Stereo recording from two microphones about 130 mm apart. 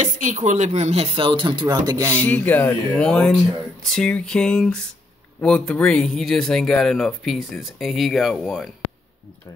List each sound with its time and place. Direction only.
0.0 s speech: 70° right (ahead or behind); by 2.0 s 35° right (ahead or behind)
2.1 s speech: 10° left (ahead or behind)